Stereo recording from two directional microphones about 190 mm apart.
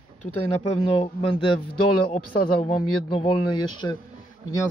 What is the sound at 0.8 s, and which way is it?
Speech, 30° left (ahead or behind).